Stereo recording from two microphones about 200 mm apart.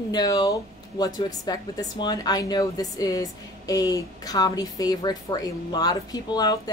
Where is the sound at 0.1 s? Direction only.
20° left (ahead or behind).